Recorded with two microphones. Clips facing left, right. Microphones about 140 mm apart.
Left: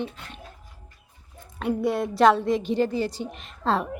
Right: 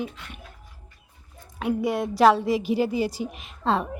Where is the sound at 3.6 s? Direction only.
Centre (ahead or behind).